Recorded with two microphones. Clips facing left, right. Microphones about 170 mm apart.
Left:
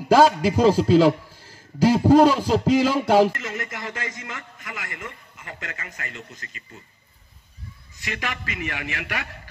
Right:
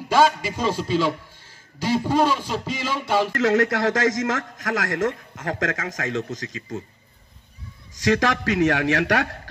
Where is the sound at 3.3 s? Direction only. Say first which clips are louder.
Right 12 dB; 80° right.